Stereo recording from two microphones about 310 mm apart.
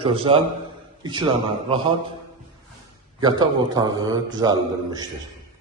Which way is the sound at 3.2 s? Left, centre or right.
Centre.